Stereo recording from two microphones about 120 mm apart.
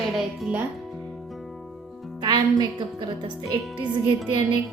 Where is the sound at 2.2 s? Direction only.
35° right (ahead or behind).